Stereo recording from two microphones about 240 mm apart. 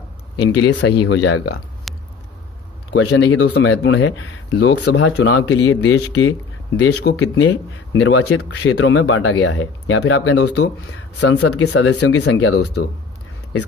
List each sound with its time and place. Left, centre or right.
0.4 s speech: left
1.9 s a sound: centre
2.9 s speech: left
11.5 s speech: left
11.8 s speech: left
12.2 s speech: left